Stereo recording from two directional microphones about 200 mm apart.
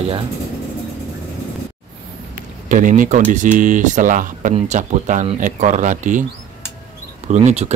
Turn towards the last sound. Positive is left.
turn(degrees=-35)  # may be behind; listen again after turning